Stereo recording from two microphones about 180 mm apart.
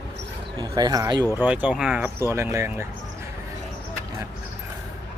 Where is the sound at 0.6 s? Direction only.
20° right (ahead or behind).